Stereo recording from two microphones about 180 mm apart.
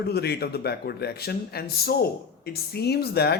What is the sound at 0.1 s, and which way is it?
A man's voice, 65° left (ahead or behind).